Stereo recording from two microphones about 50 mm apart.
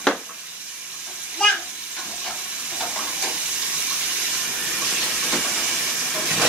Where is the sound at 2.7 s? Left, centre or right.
Centre.